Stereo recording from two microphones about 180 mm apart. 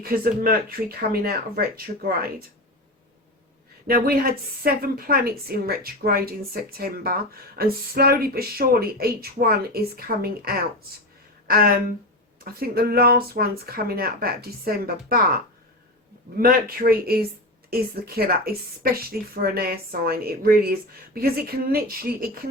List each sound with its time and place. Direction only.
0.0 s a woman's voice: 55° right (ahead or behind)
3.8 s a woman's voice: 55° right (ahead or behind)
16.4 s a woman's voice: 55° right (ahead or behind)